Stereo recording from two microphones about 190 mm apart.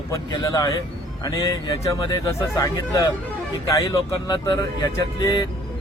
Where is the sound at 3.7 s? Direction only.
20° left (ahead or behind).